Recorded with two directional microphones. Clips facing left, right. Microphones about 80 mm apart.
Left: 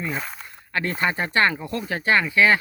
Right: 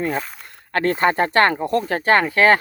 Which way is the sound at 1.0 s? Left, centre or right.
Right.